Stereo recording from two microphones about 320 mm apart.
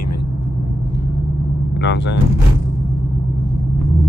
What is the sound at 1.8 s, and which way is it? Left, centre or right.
Speech, left.